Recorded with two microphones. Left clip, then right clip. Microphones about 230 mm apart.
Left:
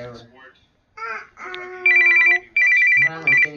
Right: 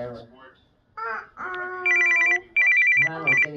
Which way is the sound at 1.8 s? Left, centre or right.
Centre.